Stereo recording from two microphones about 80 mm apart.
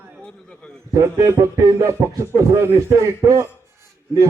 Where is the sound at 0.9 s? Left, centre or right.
Right.